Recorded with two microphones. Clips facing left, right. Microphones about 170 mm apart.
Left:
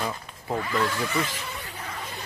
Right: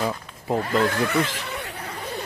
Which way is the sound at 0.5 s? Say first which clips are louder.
Right 5 dB; 45° right (ahead or behind).